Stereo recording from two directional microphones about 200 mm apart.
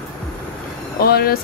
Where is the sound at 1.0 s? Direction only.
50° left (ahead or behind).